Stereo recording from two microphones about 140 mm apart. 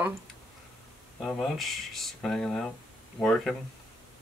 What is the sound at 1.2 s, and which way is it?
Speech, centre (ahead or behind).